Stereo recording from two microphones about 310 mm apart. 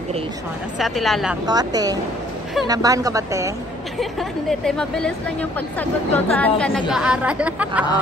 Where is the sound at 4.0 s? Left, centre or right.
Centre.